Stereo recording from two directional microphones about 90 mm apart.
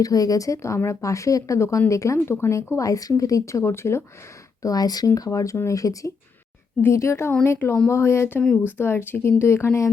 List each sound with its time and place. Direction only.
0.0 s speech: 40° left (ahead or behind)
4.6 s speech: 45° left (ahead or behind)